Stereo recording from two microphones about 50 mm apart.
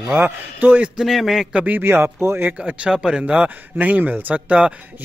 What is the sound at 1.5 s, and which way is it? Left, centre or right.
Speech, right.